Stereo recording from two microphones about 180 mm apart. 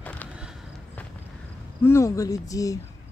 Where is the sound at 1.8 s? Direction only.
15° left (ahead or behind).